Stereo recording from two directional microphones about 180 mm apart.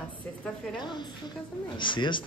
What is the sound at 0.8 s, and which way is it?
Speech, 25° left (ahead or behind).